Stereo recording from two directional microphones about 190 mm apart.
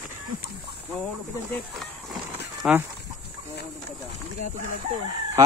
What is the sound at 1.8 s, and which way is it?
Livestock, centre (ahead or behind).